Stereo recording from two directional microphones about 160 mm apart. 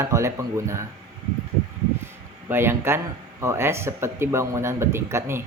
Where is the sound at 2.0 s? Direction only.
15° right (ahead or behind).